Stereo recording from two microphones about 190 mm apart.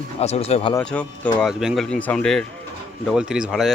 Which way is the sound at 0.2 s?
35° left (ahead or behind).